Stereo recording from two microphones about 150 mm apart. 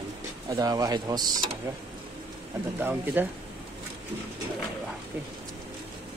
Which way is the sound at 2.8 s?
10° right (ahead or behind).